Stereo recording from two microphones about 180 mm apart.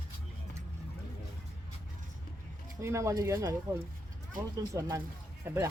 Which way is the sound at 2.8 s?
15° right (ahead or behind).